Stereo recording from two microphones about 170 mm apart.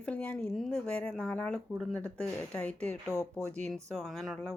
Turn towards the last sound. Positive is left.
turn(degrees=0)  # may be behind; listen again after turning